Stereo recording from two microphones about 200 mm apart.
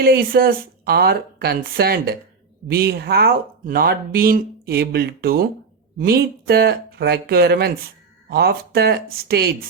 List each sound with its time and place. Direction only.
0.0 s speech: 50° right (ahead or behind)